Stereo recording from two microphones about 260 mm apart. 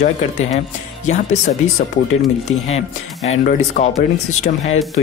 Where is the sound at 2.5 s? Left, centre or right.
Left.